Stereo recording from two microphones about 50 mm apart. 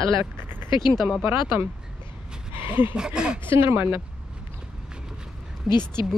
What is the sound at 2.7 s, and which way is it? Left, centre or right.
Speech, right.